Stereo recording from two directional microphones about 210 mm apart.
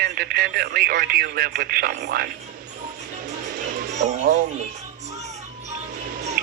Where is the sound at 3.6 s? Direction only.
40° right (ahead or behind).